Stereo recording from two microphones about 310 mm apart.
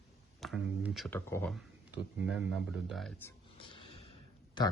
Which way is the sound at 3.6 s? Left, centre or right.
Centre.